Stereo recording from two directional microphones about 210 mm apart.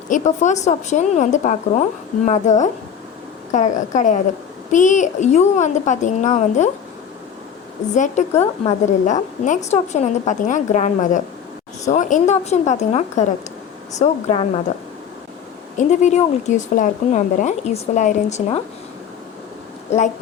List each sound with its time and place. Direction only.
0.1 s speech: 35° left (ahead or behind)
7.9 s speech: 35° left (ahead or behind)
15.8 s speech: 35° left (ahead or behind)